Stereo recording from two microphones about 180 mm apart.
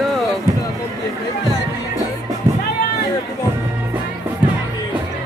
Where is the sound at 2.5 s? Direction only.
15° right (ahead or behind).